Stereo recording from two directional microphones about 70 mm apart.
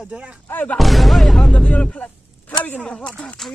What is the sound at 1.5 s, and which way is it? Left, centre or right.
Speech, centre.